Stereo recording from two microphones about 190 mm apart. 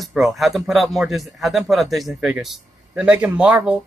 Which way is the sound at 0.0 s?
Centre (ahead or behind).